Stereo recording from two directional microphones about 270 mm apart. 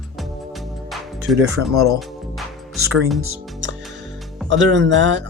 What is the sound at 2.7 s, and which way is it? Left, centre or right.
Speech, right.